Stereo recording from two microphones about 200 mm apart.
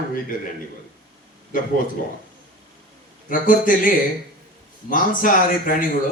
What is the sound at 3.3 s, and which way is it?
Speech, 45° left (ahead or behind).